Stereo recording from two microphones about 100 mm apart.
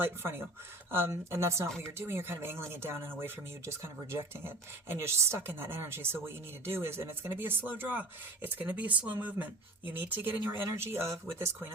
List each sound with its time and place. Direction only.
0.0 s a woman's voice: 25° right (ahead or behind)